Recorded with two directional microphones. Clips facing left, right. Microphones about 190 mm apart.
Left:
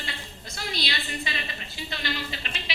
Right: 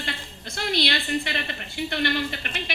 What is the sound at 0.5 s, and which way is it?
A woman's voice, 65° right (ahead or behind).